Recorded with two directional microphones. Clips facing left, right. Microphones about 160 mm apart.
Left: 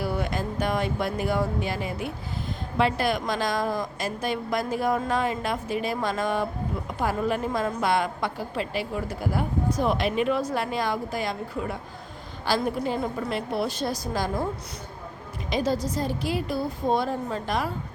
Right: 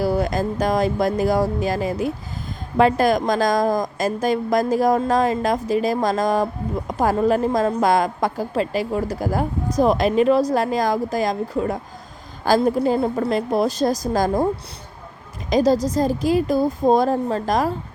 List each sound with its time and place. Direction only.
0.0 s a woman's voice: 40° right (ahead or behind)
15.4 s a woman's voice: 40° right (ahead or behind)